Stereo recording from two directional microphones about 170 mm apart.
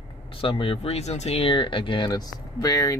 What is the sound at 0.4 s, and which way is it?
Speech, 30° left (ahead or behind).